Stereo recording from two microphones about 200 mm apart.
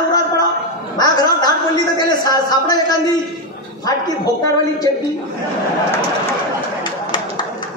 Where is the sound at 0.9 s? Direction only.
20° left (ahead or behind).